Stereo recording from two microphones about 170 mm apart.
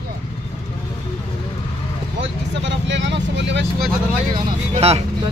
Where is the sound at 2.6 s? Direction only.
90° right.